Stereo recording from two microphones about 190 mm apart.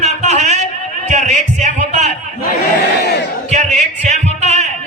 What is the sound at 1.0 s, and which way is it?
Music, 40° right (ahead or behind).